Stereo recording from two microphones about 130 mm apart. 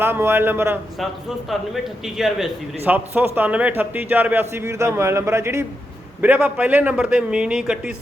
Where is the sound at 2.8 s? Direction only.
15° right (ahead or behind).